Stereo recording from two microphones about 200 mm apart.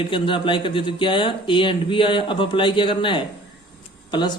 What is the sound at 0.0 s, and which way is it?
A man's voice, 25° left (ahead or behind).